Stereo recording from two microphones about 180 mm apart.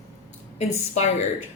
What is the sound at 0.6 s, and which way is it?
Speech, 40° left (ahead or behind).